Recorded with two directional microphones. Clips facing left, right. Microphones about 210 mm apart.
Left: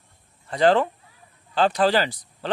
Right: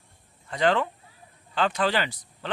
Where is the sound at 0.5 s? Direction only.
35° left (ahead or behind).